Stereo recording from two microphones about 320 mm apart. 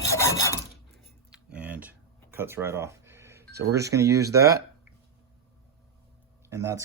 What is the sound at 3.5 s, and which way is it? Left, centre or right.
Speech, right.